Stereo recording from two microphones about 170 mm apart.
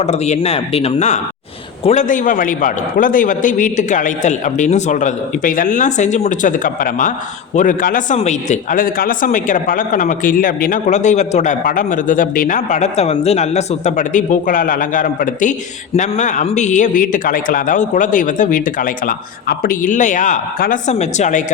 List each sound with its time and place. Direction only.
0.0 s a man's voice: 40° left (ahead or behind)